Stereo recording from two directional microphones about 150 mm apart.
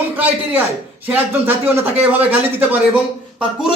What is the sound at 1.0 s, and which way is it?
Speech, 10° right (ahead or behind).